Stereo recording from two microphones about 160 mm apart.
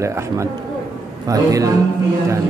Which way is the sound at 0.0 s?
20° right (ahead or behind).